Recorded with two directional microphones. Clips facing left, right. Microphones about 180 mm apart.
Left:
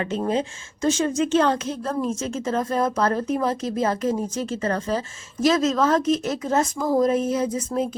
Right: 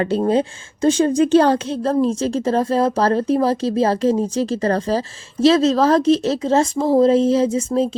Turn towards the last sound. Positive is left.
turn(degrees=-25)  # may be behind; listen again after turning